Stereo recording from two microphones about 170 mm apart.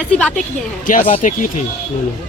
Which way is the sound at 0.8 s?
55° left (ahead or behind).